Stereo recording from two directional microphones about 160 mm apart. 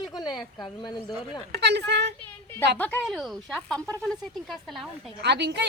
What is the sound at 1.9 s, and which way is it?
Speech, 90° right.